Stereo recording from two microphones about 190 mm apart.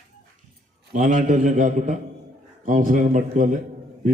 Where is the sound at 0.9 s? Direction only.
45° right (ahead or behind).